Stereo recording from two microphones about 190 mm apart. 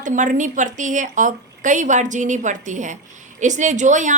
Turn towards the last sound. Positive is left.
turn(degrees=-40)  # may be behind; listen again after turning